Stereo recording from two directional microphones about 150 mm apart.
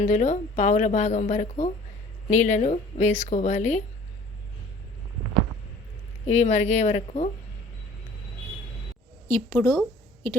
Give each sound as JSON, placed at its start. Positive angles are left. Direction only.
{"t": 0.0, "sound": "a woman's voice", "side_deg": 55}
{"t": 6.2, "sound": "a woman's voice", "side_deg": 50}
{"t": 9.3, "sound": "speech", "side_deg": 15}